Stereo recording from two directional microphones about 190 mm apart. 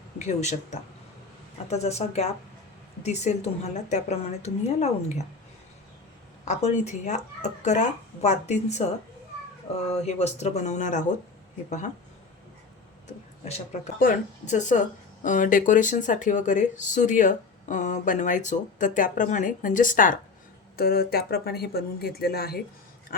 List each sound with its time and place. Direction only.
0.2 s speech: 35° left (ahead or behind)
6.5 s speech: 35° left (ahead or behind)
9.9 s speech: 35° left (ahead or behind)
13.4 s speech: 35° left (ahead or behind); by 22.6 s 55° left (ahead or behind)